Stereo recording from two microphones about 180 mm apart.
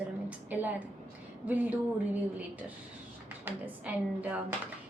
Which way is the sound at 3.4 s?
10° right (ahead or behind).